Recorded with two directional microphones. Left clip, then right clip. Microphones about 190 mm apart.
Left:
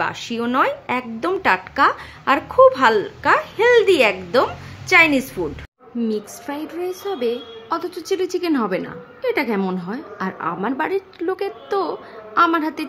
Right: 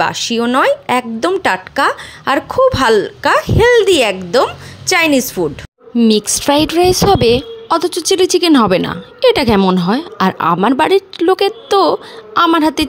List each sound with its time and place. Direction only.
0.0 s a woman's voice: 30° right (ahead or behind)
5.9 s a woman's voice: 50° right (ahead or behind)